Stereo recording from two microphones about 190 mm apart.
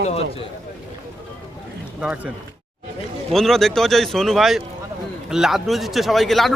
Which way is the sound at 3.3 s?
Centre (ahead or behind).